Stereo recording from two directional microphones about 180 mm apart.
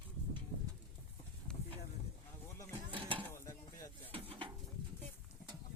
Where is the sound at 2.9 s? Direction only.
30° right (ahead or behind).